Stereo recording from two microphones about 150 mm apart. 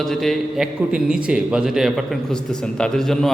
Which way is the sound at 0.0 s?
Centre (ahead or behind).